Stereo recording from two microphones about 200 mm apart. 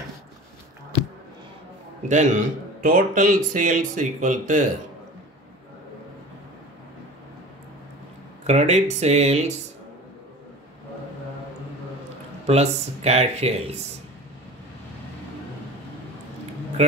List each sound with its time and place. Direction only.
2.0 s a man's voice: 40° right (ahead or behind)
8.5 s a man's voice: 35° right (ahead or behind)
12.4 s a man's voice: 30° right (ahead or behind)